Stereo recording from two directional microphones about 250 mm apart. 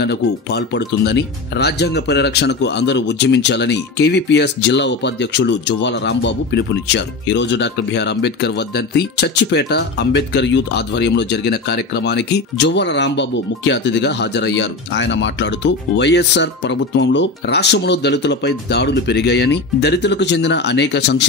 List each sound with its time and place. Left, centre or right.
0.0 s speech: left